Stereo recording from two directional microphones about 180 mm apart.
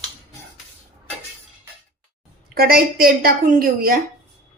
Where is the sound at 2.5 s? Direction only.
55° right (ahead or behind).